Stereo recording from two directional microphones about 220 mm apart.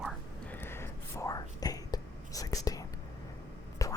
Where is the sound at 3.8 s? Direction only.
15° left (ahead or behind).